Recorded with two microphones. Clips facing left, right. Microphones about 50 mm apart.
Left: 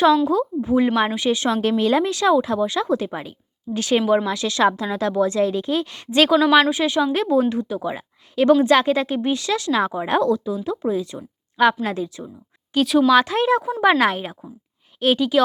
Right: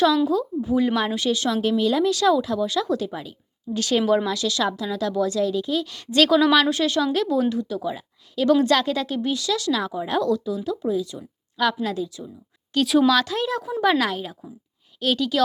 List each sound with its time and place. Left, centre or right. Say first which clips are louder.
0.3 s a woman's voice: left 3 dB; left
1.6 s speech: left 2 dB; left
2.0 s a woman's voice: left 1 dB; left
3.8 s a woman's voice: left 2 dB; left
4.0 s a woman's voice: left 1 dB; centre
4.3 s a woman's voice: left 5 dB; left
7.1 s a woman's voice: left 3 dB; left
8.6 s a woman's voice: left 4 dB; left
12.7 s speech: left 1 dB; centre
13.1 s a woman's voice: left 5 dB; left